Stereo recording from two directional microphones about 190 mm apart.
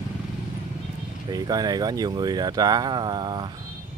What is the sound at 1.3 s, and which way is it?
Speech, 20° right (ahead or behind).